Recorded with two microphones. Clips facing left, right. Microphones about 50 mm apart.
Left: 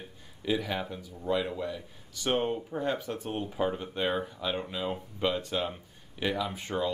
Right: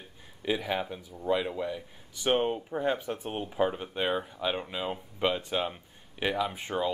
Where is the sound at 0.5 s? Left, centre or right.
Centre.